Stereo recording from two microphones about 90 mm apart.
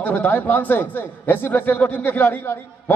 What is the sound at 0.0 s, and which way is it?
A man's voice, 20° left (ahead or behind).